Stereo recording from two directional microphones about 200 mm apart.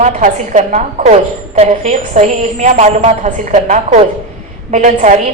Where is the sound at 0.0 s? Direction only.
35° right (ahead or behind).